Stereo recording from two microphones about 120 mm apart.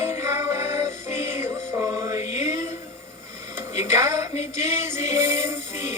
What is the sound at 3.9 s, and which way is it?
Music, 25° right (ahead or behind).